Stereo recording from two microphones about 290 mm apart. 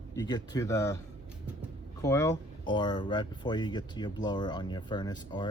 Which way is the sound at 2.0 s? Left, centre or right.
Centre.